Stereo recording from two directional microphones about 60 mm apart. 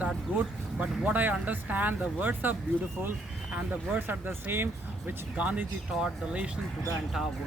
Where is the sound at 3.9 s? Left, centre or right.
Right.